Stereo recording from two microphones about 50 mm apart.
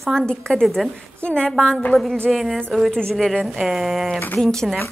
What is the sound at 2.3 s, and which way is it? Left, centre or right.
Speech, centre.